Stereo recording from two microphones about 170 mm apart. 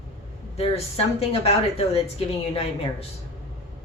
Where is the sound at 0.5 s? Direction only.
35° left (ahead or behind).